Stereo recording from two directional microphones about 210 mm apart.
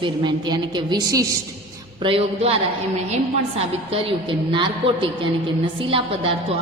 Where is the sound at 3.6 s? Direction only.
25° right (ahead or behind).